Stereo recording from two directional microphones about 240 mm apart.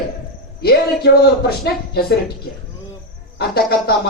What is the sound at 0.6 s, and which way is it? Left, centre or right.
A man's voice, left.